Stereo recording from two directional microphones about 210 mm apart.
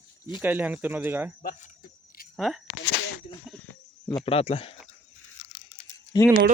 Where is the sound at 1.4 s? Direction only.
35° left (ahead or behind).